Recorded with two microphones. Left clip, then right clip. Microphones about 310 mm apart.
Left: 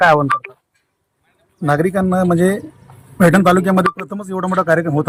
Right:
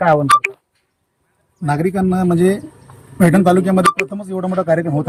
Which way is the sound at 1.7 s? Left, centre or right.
Centre.